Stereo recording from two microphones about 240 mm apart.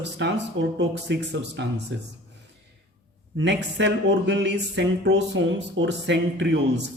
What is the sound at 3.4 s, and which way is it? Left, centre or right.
Speech, right.